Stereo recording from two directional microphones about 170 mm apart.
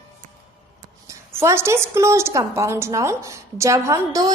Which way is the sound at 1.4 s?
15° right (ahead or behind).